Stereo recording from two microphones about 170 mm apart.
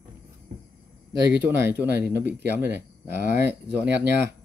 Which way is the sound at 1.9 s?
75° right (ahead or behind).